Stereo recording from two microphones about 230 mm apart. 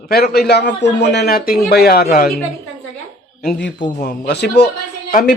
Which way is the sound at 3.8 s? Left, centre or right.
Left.